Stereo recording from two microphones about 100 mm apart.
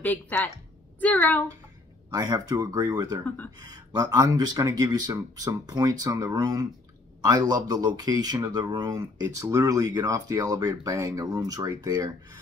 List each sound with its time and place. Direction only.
0.0 s speech: 15° left (ahead or behind)
2.0 s speech: 40° right (ahead or behind)